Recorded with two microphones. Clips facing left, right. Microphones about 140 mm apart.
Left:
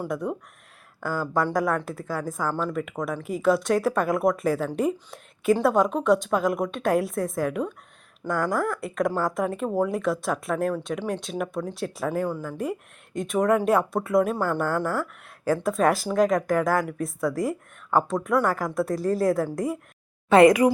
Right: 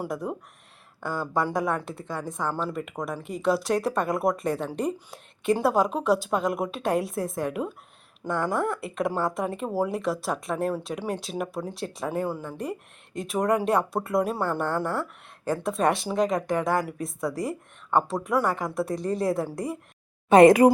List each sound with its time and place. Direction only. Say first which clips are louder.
0.1 s speech: left 2 dB; centre (ahead or behind)
20.3 s speech: right 1 dB; 25° right (ahead or behind)